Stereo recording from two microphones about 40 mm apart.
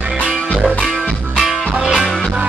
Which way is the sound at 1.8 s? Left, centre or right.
Centre.